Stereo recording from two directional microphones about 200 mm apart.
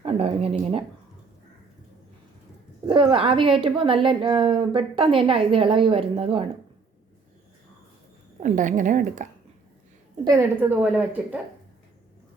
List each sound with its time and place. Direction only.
0.0 s a woman's voice: 30° right (ahead or behind)
2.8 s a woman's voice: 25° right (ahead or behind)
8.4 s a woman's voice: 40° right (ahead or behind)
10.2 s a woman's voice: 10° right (ahead or behind)